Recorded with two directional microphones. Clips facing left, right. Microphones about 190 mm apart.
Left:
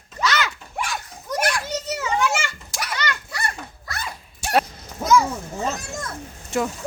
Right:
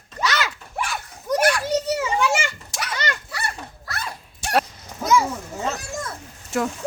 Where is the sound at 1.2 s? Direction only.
35° right (ahead or behind).